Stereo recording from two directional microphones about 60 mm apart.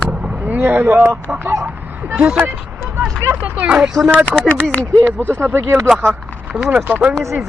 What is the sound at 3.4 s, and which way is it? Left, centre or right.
Speech, right.